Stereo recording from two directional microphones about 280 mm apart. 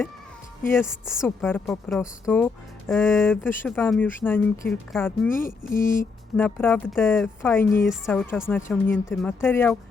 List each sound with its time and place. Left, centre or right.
0.9 s a woman's voice: centre
5.8 s speech: left
6.3 s speech: centre